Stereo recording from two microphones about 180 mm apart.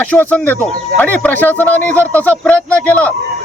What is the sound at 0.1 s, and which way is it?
Speech, 10° left (ahead or behind).